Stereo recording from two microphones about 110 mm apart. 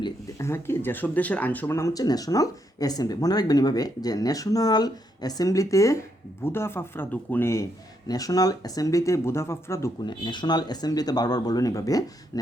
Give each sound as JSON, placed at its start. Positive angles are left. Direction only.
{"t": 0.3, "sound": "a man's voice", "side_deg": 25}
{"t": 10.0, "sound": "speech", "side_deg": 45}